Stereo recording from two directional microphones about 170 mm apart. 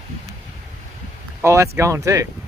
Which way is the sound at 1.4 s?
15° right (ahead or behind).